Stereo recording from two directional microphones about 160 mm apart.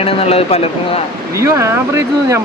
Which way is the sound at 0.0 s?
40° left (ahead or behind).